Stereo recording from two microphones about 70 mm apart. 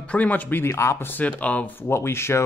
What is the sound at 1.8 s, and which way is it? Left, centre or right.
Speech, left.